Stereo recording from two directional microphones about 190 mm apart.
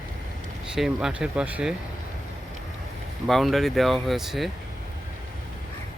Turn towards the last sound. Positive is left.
turn(degrees=0)  # may be behind; listen again after turning